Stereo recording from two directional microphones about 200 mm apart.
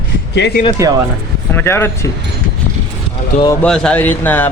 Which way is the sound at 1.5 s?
10° left (ahead or behind).